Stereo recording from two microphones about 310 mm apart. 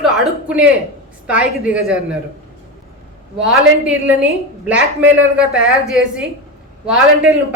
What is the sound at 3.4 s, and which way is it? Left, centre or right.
A woman's voice, centre.